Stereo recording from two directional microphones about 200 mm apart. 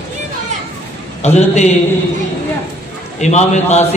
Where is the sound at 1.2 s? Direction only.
35° left (ahead or behind).